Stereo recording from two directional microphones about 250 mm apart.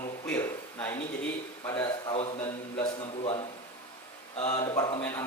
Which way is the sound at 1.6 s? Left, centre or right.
Centre.